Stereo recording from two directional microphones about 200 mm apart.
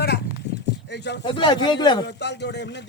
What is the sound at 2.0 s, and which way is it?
Speech, 60° left (ahead or behind).